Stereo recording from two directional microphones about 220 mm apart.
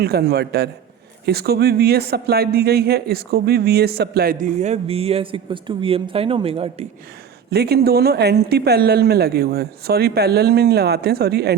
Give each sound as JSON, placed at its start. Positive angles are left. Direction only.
{"t": 0.0, "sound": "speech", "side_deg": -45}
{"t": 7.5, "sound": "speech", "side_deg": -45}